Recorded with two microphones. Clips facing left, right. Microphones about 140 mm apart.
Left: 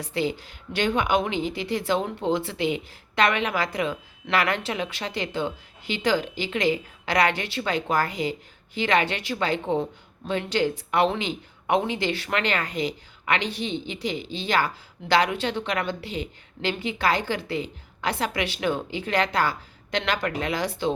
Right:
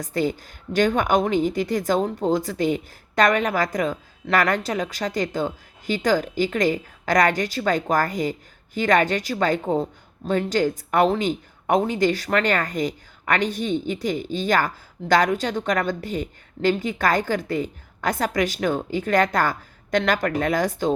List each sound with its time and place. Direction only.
0.0 s a woman's voice: 45° right (ahead or behind)